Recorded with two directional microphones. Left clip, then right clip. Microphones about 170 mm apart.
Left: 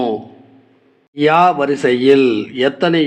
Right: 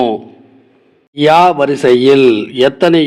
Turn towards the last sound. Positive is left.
turn(degrees=-35)  # may be behind; listen again after turning